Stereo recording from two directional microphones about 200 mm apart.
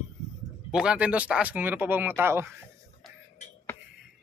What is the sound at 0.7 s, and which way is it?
Speech, 5° right (ahead or behind).